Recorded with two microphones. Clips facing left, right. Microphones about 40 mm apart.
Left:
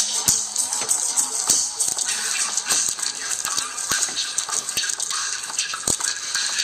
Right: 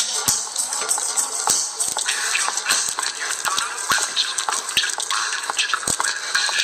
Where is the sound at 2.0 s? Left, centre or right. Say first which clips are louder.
Right 6 dB; right.